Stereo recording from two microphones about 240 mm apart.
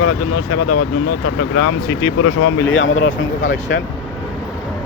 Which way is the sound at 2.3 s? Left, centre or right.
Left.